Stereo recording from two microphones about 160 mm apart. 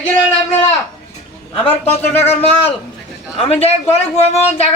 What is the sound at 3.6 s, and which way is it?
Speech, 40° left (ahead or behind).